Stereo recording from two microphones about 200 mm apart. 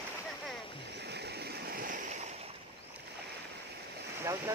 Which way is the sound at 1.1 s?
55° right (ahead or behind).